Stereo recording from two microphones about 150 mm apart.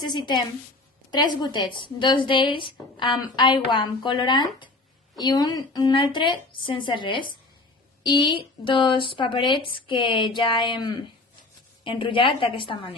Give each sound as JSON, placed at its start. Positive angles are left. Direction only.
{"t": 0.0, "sound": "a woman's voice", "side_deg": 30}